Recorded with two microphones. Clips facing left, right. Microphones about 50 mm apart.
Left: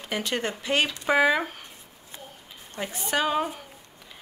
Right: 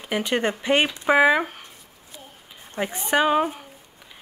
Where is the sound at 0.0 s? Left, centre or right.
Centre.